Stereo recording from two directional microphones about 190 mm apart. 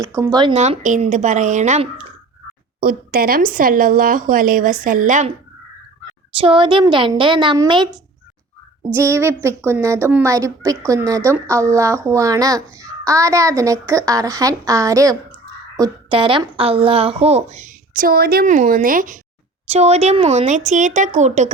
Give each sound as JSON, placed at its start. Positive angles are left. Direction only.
{"t": 0.0, "sound": "a woman's voice", "side_deg": -15}
{"t": 0.5, "sound": "a woman's voice", "side_deg": -35}
{"t": 2.8, "sound": "speech", "side_deg": -50}
{"t": 6.4, "sound": "a woman's voice", "side_deg": -25}
{"t": 8.9, "sound": "a woman's voice", "side_deg": -15}
{"t": 19.6, "sound": "a woman's voice", "side_deg": -35}